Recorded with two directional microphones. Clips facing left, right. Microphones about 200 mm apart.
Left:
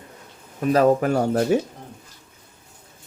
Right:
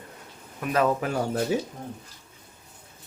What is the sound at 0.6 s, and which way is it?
Speech, 40° left (ahead or behind).